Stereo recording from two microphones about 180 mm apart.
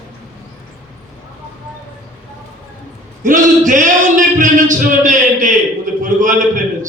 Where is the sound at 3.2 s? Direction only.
45° right (ahead or behind).